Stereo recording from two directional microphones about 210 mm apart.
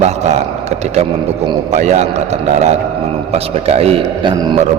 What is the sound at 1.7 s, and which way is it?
A man's voice, 35° right (ahead or behind).